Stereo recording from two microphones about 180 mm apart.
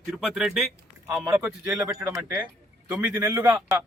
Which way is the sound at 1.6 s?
15° right (ahead or behind).